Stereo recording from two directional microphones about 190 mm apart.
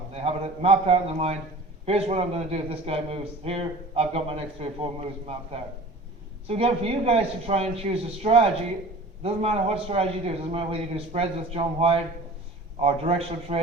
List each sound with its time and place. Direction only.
0.1 s a man's voice: 30° right (ahead or behind)
6.5 s a man's voice: 30° right (ahead or behind)